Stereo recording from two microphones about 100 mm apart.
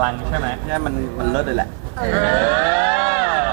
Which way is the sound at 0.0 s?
10° right (ahead or behind).